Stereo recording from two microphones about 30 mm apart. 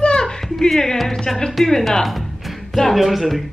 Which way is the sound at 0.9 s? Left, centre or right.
Centre.